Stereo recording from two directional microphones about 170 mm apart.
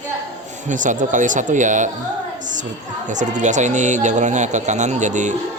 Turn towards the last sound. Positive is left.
turn(degrees=-45)  # may be behind; listen again after turning